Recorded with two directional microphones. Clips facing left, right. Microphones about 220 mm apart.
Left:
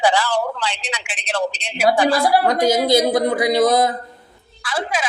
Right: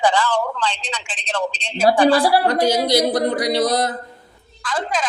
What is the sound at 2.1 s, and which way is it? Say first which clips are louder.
Speech: right 1 dB; 30° right (ahead or behind).